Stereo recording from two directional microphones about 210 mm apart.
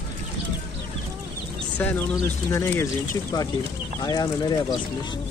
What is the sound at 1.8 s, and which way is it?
Speech, 10° left (ahead or behind).